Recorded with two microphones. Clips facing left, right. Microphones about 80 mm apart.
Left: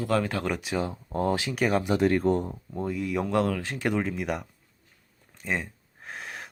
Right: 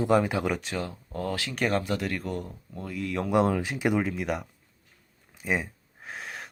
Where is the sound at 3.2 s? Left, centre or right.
Right.